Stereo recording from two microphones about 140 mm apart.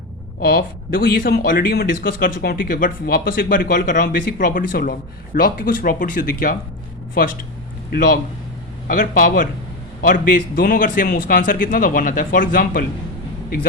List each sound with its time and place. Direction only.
0.3 s speech: 90° left
8.9 s a man's voice: 85° left